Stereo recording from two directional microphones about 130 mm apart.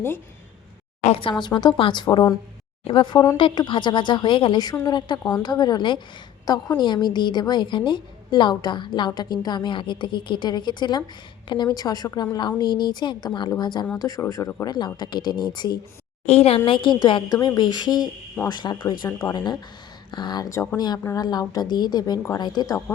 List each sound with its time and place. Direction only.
1.0 s a woman's voice: 50° left (ahead or behind)
1.3 s a woman's voice: 35° left (ahead or behind)
16.2 s a woman's voice: 55° left (ahead or behind); by 22.8 s 30° left (ahead or behind)